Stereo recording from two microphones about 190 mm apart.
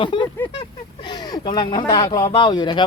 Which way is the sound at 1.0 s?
20° left (ahead or behind).